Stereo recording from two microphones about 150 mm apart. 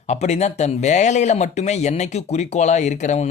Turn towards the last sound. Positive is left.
turn(degrees=50)  # may be behind; listen again after turning